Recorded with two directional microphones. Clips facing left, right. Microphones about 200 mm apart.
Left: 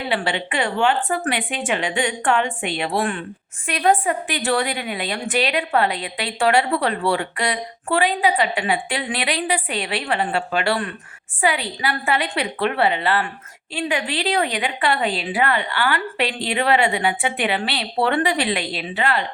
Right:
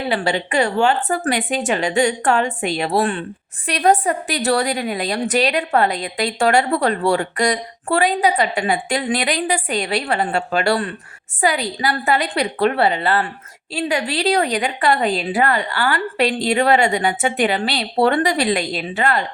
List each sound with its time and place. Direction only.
0.1 s a woman's voice: 40° right (ahead or behind)